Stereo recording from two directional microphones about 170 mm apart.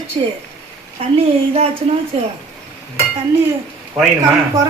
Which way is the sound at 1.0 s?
35° right (ahead or behind).